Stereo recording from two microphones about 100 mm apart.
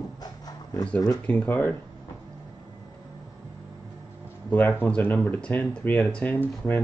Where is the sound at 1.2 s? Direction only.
15° left (ahead or behind).